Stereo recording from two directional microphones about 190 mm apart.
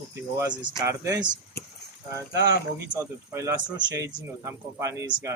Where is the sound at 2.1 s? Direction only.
15° right (ahead or behind).